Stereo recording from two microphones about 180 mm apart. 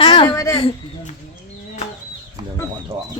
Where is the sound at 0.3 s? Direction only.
15° left (ahead or behind).